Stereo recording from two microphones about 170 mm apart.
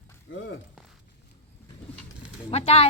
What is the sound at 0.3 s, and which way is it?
Speech, 90° left.